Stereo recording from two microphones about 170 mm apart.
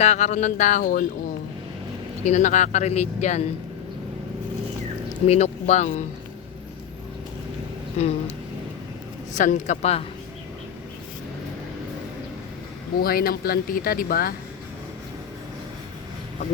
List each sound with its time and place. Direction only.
0.0 s speech: 45° left (ahead or behind)
2.2 s speech: 45° left (ahead or behind)
5.2 s speech: 40° left (ahead or behind)
8.0 s speech: 40° left (ahead or behind)
9.3 s speech: 50° left (ahead or behind)
13.0 s speech: 60° left (ahead or behind)